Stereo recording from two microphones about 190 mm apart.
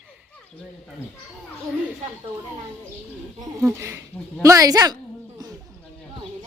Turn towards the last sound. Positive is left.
turn(degrees=-20)  # may be behind; listen again after turning